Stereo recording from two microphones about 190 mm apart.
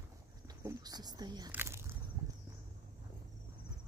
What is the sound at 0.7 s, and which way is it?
Speech, 20° right (ahead or behind).